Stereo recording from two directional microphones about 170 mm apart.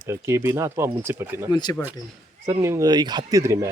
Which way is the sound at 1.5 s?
25° left (ahead or behind).